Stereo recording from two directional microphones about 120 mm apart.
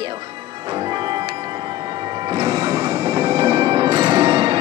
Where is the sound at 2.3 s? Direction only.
45° right (ahead or behind).